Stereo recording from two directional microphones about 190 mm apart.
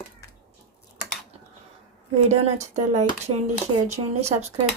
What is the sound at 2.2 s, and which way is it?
Speech, 35° right (ahead or behind).